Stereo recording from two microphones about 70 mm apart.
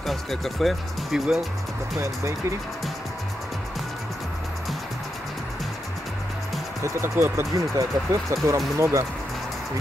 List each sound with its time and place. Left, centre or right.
0.0 s speech: centre
6.8 s speech: right
7.7 s speech: right